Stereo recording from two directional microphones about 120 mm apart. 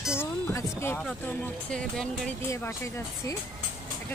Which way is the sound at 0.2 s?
20° left (ahead or behind).